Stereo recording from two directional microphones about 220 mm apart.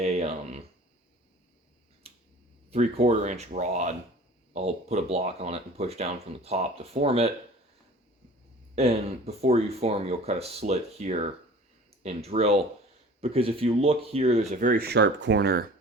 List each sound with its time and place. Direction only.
0.0 s a sound: 30° right (ahead or behind)
2.0 s finger snapping: 25° right (ahead or behind)
2.6 s speech: 30° right (ahead or behind)
8.7 s speech: 30° right (ahead or behind); by 15.7 s 45° right (ahead or behind)